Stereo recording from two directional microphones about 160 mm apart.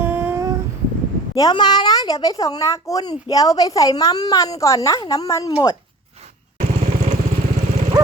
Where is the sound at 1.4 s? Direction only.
25° left (ahead or behind).